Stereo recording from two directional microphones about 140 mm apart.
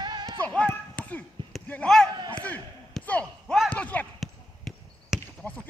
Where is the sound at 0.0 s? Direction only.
30° right (ahead or behind).